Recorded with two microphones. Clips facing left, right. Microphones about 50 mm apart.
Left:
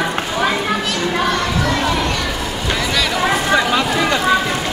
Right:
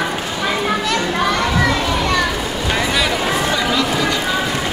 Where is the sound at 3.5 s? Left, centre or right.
Left.